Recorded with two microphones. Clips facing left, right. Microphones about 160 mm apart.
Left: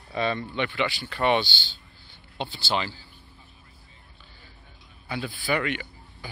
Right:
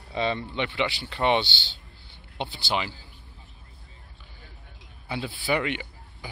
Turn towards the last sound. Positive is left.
turn(degrees=-20)  # may be behind; listen again after turning